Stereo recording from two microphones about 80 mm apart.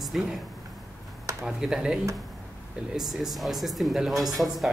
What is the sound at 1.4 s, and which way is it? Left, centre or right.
Speech, centre.